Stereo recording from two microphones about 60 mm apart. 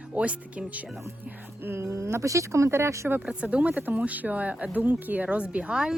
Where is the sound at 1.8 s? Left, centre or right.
Right.